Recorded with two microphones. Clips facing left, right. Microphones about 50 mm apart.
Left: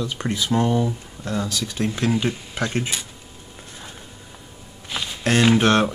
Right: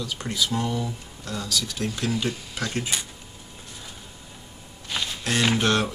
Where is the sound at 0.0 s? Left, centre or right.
Left.